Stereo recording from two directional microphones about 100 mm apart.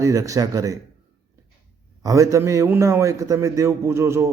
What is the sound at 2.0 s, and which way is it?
A man's voice, 35° right (ahead or behind).